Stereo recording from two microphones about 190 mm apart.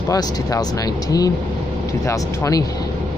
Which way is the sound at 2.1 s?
15° left (ahead or behind).